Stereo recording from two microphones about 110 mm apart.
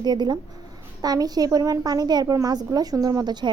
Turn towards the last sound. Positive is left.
turn(degrees=-40)  # may be behind; listen again after turning